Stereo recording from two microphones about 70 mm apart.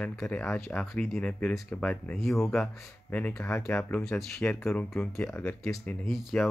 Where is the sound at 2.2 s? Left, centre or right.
Centre.